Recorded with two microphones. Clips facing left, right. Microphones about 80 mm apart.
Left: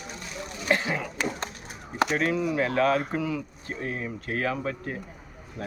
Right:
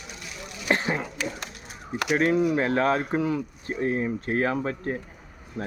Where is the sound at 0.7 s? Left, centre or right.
Right.